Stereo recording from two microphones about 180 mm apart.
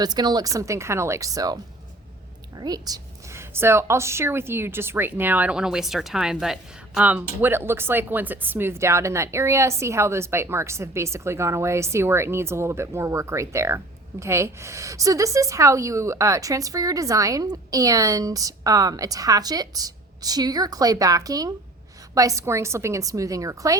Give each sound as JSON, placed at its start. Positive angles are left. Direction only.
{"t": 0.0, "sound": "speech", "side_deg": -25}
{"t": 2.6, "sound": "a woman's voice", "side_deg": -20}